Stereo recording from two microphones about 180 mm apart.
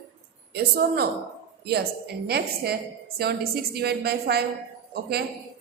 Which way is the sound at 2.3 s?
60° right (ahead or behind).